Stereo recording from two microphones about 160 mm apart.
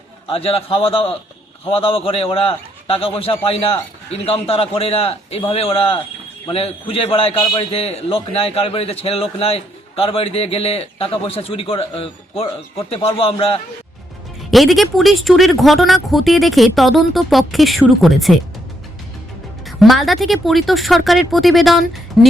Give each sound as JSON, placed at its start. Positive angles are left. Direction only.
{"t": 0.3, "sound": "a man's voice", "side_deg": 35}
{"t": 14.5, "sound": "speech", "side_deg": 0}
{"t": 19.6, "sound": "speech", "side_deg": 0}